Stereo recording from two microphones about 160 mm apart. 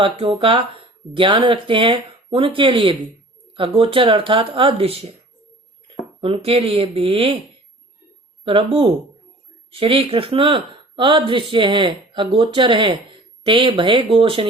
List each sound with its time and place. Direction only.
0.0 s speech: 35° right (ahead or behind)
8.4 s speech: 35° right (ahead or behind)